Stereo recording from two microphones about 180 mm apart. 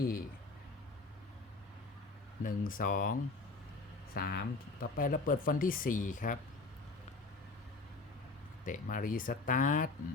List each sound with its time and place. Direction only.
2.4 s speech: 50° left (ahead or behind)
8.6 s speech: 45° left (ahead or behind)